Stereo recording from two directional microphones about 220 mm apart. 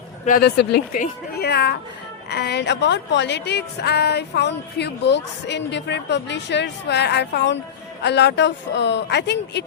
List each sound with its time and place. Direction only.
0.3 s a woman's voice: 45° left (ahead or behind)